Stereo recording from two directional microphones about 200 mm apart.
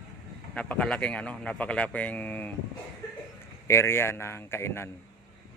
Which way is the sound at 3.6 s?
15° left (ahead or behind).